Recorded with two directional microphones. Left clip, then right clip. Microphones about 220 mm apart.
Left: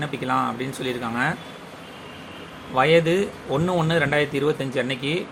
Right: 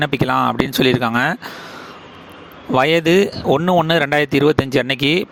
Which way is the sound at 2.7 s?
50° right (ahead or behind).